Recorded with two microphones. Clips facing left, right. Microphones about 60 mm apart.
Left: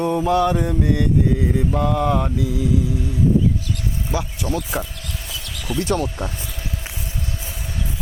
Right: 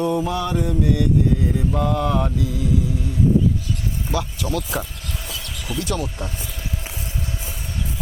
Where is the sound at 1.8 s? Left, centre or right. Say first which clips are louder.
Left 1 dB; centre.